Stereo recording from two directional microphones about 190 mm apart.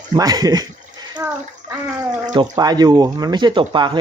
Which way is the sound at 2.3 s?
20° right (ahead or behind).